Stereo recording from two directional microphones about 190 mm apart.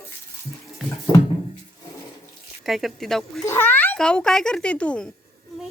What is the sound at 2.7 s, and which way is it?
Speech, centre (ahead or behind).